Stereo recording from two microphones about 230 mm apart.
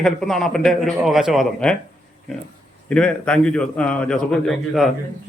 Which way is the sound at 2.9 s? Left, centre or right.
Centre.